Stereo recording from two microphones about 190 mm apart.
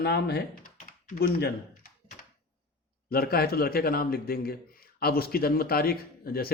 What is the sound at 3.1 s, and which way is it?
A man's voice, 55° left (ahead or behind).